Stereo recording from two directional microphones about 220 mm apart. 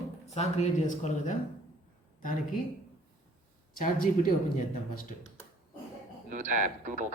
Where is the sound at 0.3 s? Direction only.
30° left (ahead or behind).